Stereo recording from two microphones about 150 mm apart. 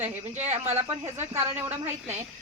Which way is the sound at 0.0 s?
45° right (ahead or behind).